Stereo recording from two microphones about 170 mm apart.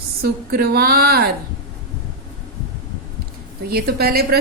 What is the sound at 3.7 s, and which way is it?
Speech, 65° right (ahead or behind).